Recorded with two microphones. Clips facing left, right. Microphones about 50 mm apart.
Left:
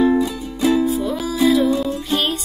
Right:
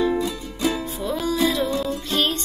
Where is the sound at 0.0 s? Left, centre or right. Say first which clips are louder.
Left 5 dB; centre.